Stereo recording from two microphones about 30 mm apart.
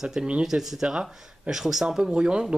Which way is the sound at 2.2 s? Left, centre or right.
Right.